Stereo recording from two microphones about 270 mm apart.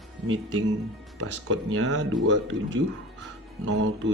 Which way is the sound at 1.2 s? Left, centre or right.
Right.